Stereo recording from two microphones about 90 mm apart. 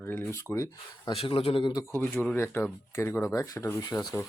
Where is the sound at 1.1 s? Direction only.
90° left.